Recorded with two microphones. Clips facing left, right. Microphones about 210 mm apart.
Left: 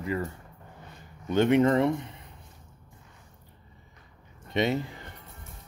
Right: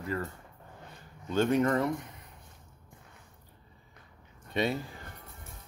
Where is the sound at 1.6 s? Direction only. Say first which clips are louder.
Left 5 dB; 25° left (ahead or behind).